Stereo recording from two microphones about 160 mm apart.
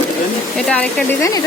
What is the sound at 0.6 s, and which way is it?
Speech, 5° left (ahead or behind).